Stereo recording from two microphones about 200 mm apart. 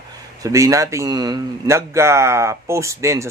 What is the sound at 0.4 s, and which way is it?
A man's voice, 15° right (ahead or behind).